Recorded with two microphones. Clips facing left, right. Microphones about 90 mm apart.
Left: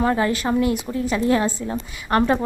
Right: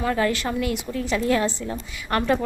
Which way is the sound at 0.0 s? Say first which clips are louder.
Left 3 dB; 25° left (ahead or behind).